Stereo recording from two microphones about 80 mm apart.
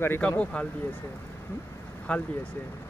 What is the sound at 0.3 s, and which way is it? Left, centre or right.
Speech, centre.